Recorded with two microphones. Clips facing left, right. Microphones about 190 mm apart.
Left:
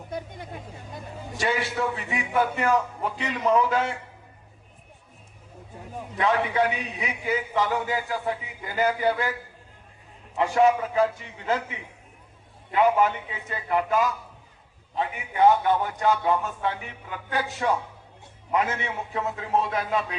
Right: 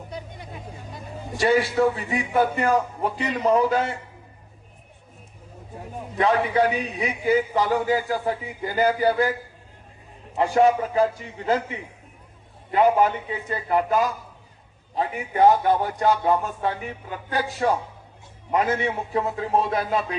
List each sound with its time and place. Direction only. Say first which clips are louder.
1.4 s a man's voice: right 7 dB; 35° right (ahead or behind)
6.1 s a man's voice: right 3 dB; 35° right (ahead or behind)
10.3 s a man's voice: right 2 dB; 35° right (ahead or behind)